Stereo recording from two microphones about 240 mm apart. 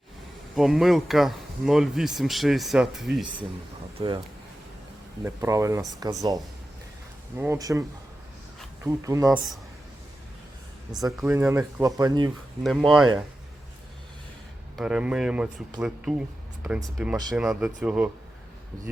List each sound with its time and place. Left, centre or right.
0.5 s speech: centre
3.9 s speech: centre
5.2 s speech: centre
7.3 s speech: centre
11.0 s speech: centre
12.6 s speech: centre
14.8 s speech: centre